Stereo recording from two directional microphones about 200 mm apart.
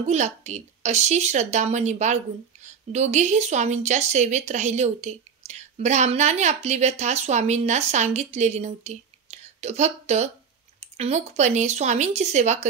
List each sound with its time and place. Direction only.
0.0 s a woman's voice: 35° right (ahead or behind)